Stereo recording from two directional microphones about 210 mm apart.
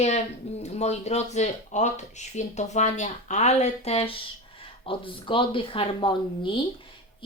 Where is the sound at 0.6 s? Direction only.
30° left (ahead or behind).